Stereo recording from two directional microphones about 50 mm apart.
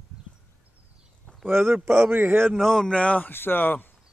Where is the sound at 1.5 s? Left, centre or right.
Right.